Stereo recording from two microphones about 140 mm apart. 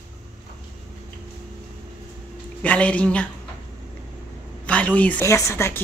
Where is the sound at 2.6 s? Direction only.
10° left (ahead or behind).